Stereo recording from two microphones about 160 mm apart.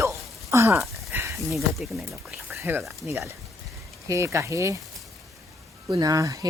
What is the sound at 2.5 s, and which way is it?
Speech, 15° right (ahead or behind).